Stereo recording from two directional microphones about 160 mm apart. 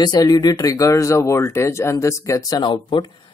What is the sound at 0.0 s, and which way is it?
Speech, 25° left (ahead or behind).